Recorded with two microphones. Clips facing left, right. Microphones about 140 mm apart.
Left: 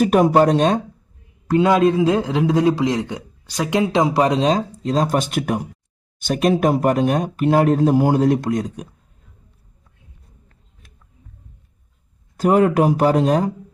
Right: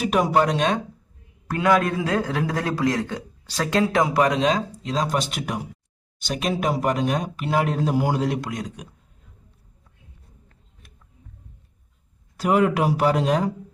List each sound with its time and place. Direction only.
0.0 s speech: 45° left (ahead or behind)
1.5 s a man's voice: 25° left (ahead or behind); by 8.9 s 45° left (ahead or behind)
12.4 s speech: 40° left (ahead or behind)